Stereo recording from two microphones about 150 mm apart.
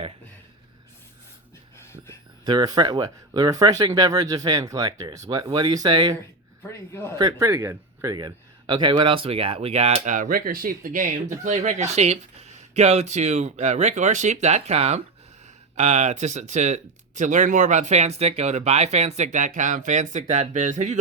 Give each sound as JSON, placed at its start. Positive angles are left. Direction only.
{"t": 1.8, "sound": "a sound", "side_deg": 15}
{"t": 2.4, "sound": "speech", "side_deg": -30}
{"t": 6.6, "sound": "a man's voice", "side_deg": 15}
{"t": 7.2, "sound": "speech", "side_deg": -20}